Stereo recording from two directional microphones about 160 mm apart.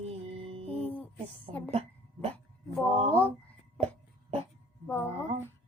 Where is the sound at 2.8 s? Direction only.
40° right (ahead or behind).